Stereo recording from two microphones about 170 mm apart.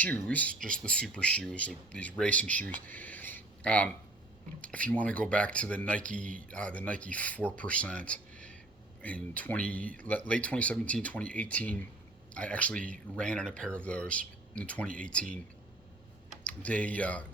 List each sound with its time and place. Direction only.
0.0 s speech: 10° left (ahead or behind)
2.8 s a sound: 10° left (ahead or behind)
4.6 s speech: 5° left (ahead or behind)
16.4 s speech: 10° left (ahead or behind)